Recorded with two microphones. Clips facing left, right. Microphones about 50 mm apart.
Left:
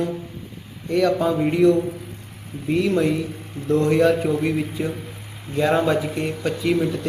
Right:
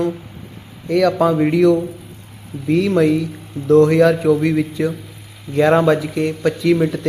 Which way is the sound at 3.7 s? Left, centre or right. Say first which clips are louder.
Right 6 dB; right.